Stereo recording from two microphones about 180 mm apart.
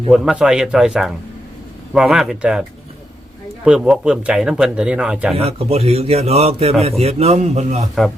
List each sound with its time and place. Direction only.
0.1 s speech: 5° right (ahead or behind)
3.7 s speech: 5° right (ahead or behind)
5.3 s a man's voice: 35° right (ahead or behind)